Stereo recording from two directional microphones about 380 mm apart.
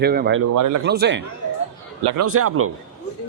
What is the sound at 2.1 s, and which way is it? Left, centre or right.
Speech, right.